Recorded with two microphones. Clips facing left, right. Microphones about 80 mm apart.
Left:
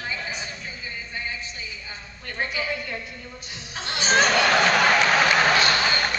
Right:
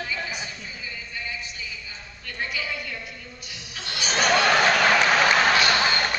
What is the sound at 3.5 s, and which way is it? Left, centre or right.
Music, left.